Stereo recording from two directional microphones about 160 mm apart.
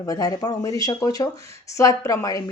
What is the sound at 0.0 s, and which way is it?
A woman's voice, 25° left (ahead or behind).